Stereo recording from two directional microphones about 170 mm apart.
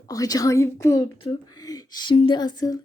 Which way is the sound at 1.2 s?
25° left (ahead or behind).